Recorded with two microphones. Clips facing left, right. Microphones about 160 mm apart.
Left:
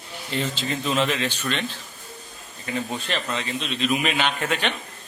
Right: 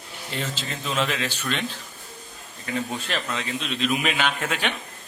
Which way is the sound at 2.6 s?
Centre (ahead or behind).